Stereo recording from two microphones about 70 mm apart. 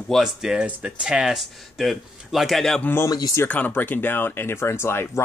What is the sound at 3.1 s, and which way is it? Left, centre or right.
Speech, left.